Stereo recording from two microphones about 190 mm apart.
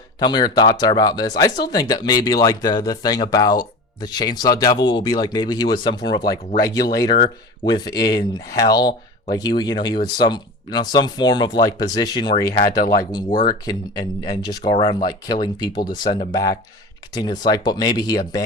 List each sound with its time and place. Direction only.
0.2 s speech: 20° left (ahead or behind)